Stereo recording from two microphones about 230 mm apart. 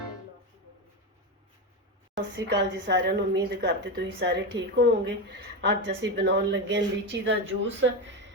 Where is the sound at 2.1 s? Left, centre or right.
Right.